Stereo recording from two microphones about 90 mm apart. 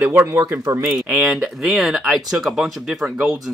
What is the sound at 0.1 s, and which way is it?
Speech, 30° right (ahead or behind).